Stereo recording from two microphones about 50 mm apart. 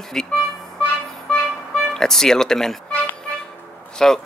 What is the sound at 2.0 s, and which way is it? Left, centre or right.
Speech, centre.